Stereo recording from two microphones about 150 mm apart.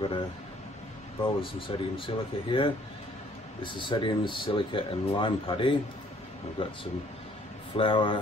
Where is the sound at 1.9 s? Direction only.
35° left (ahead or behind).